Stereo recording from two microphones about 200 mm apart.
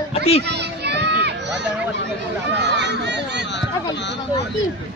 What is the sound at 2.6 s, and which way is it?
Speech, 60° right (ahead or behind).